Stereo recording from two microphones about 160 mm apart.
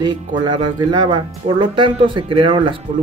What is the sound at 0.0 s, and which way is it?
Speech, 30° right (ahead or behind).